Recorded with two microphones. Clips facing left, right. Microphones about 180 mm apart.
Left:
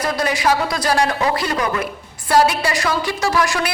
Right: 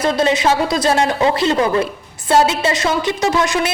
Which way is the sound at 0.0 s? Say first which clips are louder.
Right 4 dB; 25° right (ahead or behind).